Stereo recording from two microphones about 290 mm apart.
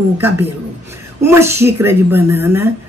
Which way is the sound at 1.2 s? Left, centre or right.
Centre.